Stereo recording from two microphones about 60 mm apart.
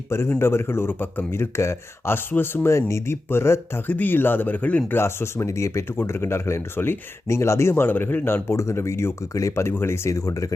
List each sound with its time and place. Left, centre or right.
0.1 s speech: left
2.6 s speech: left
3.8 s speech: left
4.9 s speech: left
7.3 s speech: left
8.4 s speech: left
9.3 s speech: left